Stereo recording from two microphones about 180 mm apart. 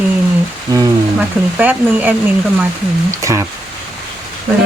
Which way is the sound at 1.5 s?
10° right (ahead or behind).